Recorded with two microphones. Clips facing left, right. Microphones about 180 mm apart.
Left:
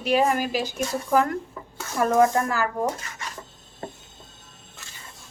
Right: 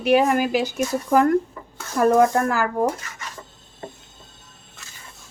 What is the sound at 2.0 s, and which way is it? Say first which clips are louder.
Speech: right 3 dB; 55° right (ahead or behind).